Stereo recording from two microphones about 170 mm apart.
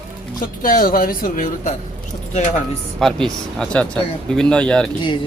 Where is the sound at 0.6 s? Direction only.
55° left (ahead or behind).